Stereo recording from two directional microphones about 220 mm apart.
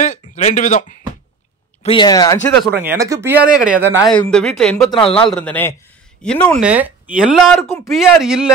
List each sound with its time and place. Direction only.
0.0 s a sound: 35° left (ahead or behind)
1.8 s speech: 20° left (ahead or behind)
2.8 s speech: 10° right (ahead or behind)
4.1 s speech: 5° left (ahead or behind)
6.6 s speech: 5° right (ahead or behind)